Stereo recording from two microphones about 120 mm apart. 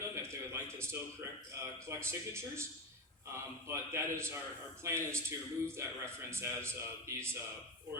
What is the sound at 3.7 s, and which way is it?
A man's voice, 25° right (ahead or behind).